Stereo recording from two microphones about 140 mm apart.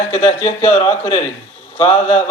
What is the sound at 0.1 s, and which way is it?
Speech, 50° left (ahead or behind).